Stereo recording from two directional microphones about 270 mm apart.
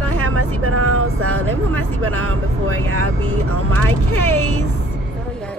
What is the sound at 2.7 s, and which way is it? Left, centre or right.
Speech, right.